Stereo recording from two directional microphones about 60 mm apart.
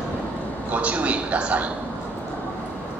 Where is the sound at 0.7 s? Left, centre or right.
Right.